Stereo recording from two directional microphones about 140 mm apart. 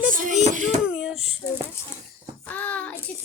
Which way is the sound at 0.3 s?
60° right (ahead or behind).